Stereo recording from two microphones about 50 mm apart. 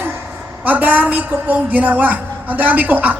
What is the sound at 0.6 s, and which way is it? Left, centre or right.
A woman's voice, right.